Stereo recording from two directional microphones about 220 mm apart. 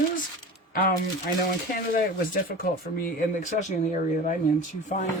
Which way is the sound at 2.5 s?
40° left (ahead or behind).